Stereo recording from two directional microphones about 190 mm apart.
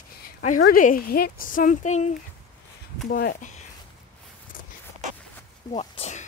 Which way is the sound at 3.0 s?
50° left (ahead or behind).